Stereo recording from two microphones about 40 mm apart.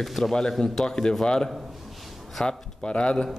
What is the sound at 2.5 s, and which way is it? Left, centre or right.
Speech, left.